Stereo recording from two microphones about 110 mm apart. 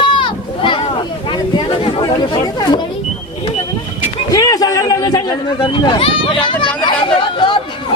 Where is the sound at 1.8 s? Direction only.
45° left (ahead or behind).